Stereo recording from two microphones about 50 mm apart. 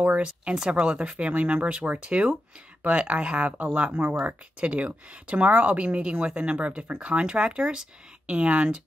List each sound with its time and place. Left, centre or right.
0.0 s speech: right